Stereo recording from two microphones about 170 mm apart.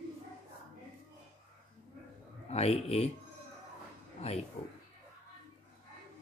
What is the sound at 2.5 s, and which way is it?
Speech, 35° left (ahead or behind).